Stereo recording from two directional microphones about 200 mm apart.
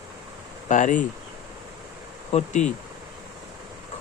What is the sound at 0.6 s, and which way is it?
Speech, 40° left (ahead or behind).